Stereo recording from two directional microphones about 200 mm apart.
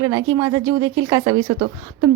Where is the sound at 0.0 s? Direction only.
20° right (ahead or behind).